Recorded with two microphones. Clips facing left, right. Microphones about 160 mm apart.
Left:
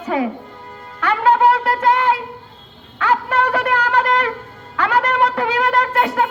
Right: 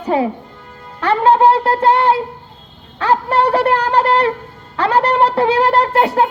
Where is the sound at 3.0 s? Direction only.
35° right (ahead or behind).